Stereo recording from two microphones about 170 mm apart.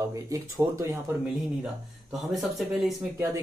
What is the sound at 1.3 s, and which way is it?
Speech, centre (ahead or behind).